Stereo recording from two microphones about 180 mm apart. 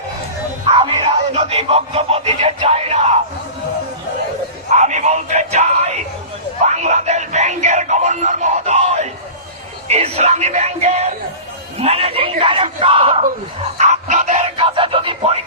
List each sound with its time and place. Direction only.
0.6 s music: 30° right (ahead or behind)
4.7 s music: 40° right (ahead or behind)
6.7 s a sound: 40° right (ahead or behind)
9.9 s yell: 35° right (ahead or behind)
11.8 s a sound: 35° right (ahead or behind)
13.7 s music: 40° right (ahead or behind)